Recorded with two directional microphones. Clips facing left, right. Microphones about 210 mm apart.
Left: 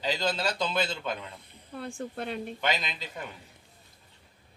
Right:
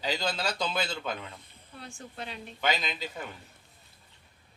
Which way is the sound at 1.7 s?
55° left (ahead or behind).